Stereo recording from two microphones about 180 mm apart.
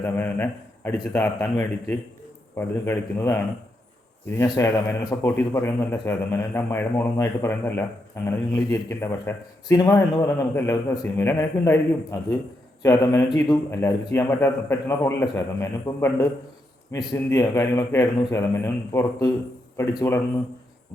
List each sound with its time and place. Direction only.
0.0 s a man's voice: 10° left (ahead or behind)
12.8 s a man's voice: 15° left (ahead or behind)